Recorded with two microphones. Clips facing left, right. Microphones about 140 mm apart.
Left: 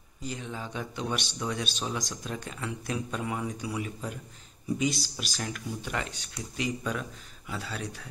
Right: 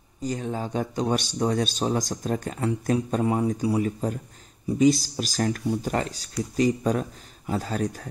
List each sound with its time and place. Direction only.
0.2 s speech: 45° right (ahead or behind)